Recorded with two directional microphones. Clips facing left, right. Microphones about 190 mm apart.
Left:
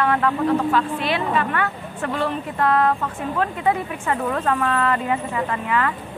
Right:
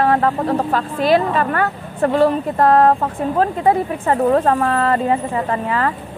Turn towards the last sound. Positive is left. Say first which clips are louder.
# right 3 dB
turn(degrees=-35)  # may be behind; listen again after turning